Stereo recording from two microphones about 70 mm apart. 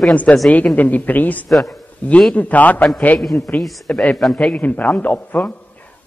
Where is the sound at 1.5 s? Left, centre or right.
Centre.